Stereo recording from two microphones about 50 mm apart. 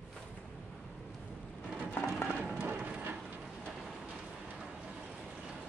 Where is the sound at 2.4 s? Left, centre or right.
Right.